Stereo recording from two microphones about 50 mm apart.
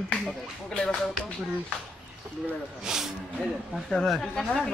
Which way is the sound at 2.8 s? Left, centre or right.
Centre.